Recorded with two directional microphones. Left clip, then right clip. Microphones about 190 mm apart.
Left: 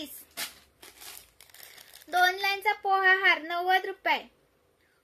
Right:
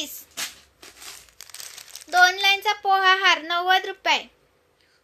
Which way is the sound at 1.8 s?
20° left (ahead or behind).